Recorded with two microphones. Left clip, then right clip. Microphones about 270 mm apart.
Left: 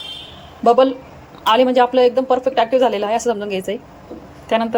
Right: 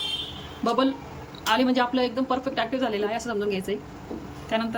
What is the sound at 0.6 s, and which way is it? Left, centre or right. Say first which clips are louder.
A man's voice: left 11 dB; centre.